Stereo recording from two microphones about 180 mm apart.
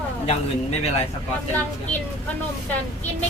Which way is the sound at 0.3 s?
35° left (ahead or behind).